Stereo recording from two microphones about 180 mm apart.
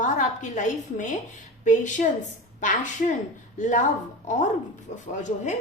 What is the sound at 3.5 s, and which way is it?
Speech, 45° left (ahead or behind).